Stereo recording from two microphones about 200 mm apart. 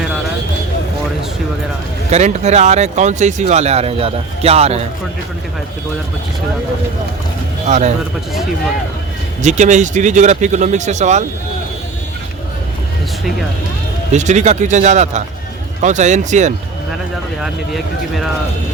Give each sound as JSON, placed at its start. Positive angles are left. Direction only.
{"t": 2.0, "sound": "speech", "side_deg": -35}
{"t": 7.7, "sound": "speech", "side_deg": -35}
{"t": 9.4, "sound": "speech", "side_deg": -35}
{"t": 14.1, "sound": "speech", "side_deg": -35}
{"t": 17.4, "sound": "speech", "side_deg": 0}